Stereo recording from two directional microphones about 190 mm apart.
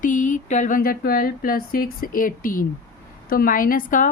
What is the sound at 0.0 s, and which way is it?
Speech, 40° left (ahead or behind).